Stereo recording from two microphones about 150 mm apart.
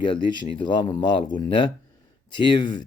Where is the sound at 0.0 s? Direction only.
30° left (ahead or behind).